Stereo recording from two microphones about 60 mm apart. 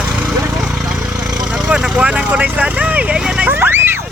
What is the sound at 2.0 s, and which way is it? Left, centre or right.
Vehicle, right.